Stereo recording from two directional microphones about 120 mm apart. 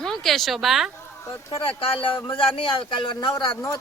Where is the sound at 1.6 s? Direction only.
50° left (ahead or behind).